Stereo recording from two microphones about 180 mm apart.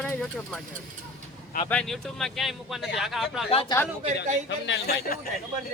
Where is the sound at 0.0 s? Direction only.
5° left (ahead or behind).